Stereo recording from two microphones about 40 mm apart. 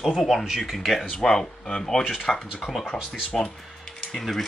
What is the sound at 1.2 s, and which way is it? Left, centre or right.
Speech, centre.